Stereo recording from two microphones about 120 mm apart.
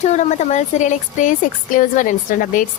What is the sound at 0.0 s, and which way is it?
A woman's voice, 85° left.